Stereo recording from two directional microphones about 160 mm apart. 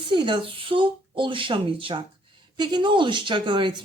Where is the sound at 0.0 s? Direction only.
30° right (ahead or behind).